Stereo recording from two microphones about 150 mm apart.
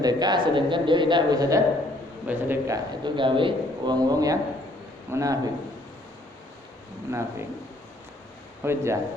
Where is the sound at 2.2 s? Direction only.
10° right (ahead or behind).